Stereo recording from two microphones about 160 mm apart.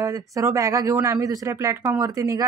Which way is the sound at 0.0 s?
20° right (ahead or behind).